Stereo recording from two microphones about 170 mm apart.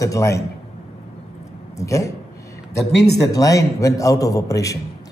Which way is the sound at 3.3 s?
20° left (ahead or behind).